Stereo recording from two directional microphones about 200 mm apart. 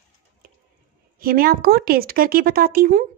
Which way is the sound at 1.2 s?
45° right (ahead or behind).